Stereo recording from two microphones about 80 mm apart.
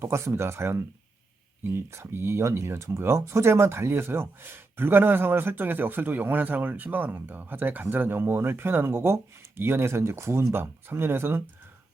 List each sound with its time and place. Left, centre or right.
0.0 s speech: right